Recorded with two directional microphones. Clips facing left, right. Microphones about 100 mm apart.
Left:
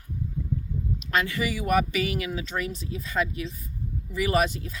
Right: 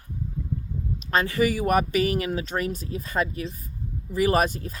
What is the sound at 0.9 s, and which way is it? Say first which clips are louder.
Speech: right 4 dB; 35° right (ahead or behind).